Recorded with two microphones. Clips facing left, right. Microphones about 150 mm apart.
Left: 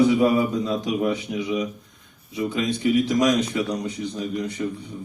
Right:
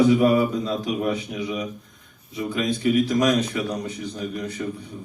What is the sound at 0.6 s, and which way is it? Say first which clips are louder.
Speech: left 1 dB; 25° left (ahead or behind).